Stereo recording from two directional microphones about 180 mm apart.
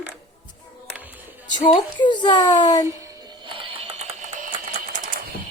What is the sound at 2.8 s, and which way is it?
Music, 20° right (ahead or behind).